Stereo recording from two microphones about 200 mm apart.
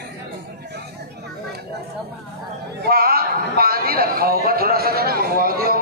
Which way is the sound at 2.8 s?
50° right (ahead or behind).